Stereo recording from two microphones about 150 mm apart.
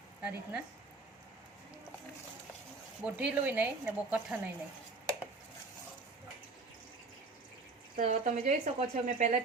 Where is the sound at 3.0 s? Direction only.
10° right (ahead or behind).